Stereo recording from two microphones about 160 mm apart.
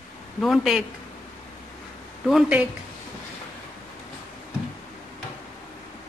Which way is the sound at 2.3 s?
5° right (ahead or behind).